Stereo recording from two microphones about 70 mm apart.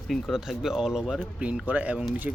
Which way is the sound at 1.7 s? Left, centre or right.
Right.